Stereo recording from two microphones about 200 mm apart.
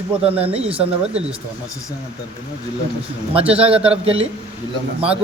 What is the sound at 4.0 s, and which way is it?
Speech, 30° right (ahead or behind).